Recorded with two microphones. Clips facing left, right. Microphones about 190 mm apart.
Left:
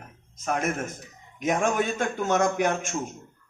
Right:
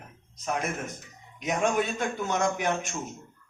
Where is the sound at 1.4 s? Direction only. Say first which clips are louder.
Left 2 dB; 45° left (ahead or behind).